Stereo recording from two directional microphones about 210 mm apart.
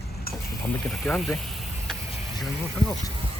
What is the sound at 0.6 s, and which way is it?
Speech, 5° left (ahead or behind).